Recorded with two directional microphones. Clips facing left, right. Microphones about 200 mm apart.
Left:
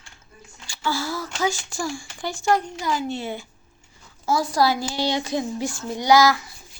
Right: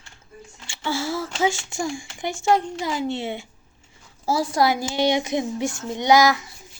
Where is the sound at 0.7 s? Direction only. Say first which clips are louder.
Right 1 dB; 25° right (ahead or behind).